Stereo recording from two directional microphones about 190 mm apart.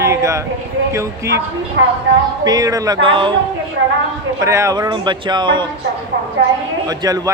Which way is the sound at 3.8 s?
90° right.